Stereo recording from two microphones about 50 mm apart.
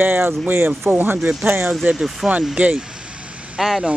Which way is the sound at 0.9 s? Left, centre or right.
Right.